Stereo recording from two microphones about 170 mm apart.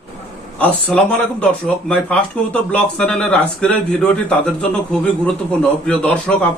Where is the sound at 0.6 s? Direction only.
5° left (ahead or behind).